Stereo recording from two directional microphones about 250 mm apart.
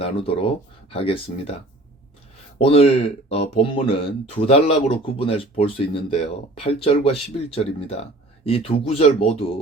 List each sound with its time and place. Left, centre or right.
0.0 s speech: left
2.6 s speech: left